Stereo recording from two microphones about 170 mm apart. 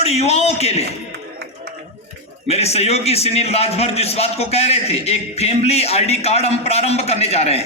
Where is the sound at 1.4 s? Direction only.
80° right.